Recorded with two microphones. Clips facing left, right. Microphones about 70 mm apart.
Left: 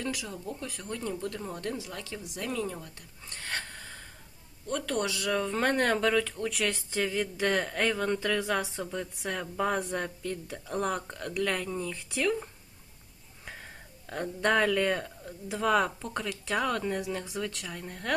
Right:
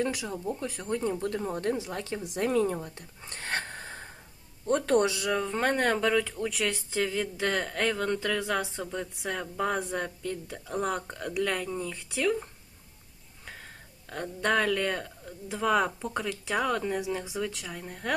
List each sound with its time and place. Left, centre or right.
0.0 s speech: right
5.2 s speech: centre